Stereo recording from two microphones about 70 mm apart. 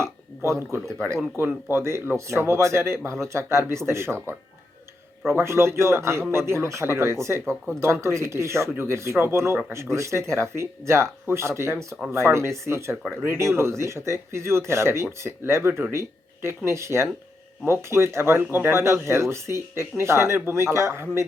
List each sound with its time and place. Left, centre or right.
0.0 s speech: right